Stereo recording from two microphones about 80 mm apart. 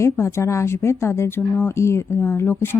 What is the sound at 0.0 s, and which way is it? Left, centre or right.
Speech, left.